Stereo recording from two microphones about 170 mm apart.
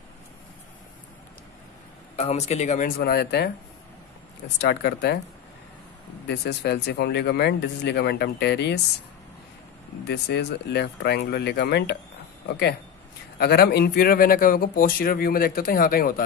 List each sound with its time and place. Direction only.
2.1 s speech: 40° left (ahead or behind); by 3.5 s 70° left (ahead or behind)
4.6 s speech: 75° left (ahead or behind)
6.2 s speech: 80° left
10.0 s speech: 75° left (ahead or behind)
13.4 s speech: 70° left (ahead or behind)